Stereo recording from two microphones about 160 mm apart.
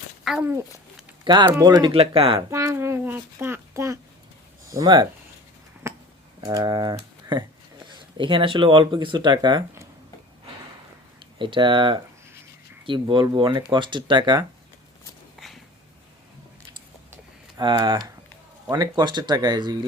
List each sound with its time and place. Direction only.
0.3 s a child's voice: 5° right (ahead or behind)
1.2 s speech: 30° right (ahead or behind)
2.0 s speech: 35° right (ahead or behind)
2.5 s a sound: 15° right (ahead or behind)
4.7 s speech: 25° right (ahead or behind)
5.8 s a sound: 15° right (ahead or behind)
6.4 s speech: 20° right (ahead or behind)
11.2 s speech: 30° right (ahead or behind)
15.4 s a sound: centre (ahead or behind)
17.6 s speech: 30° right (ahead or behind)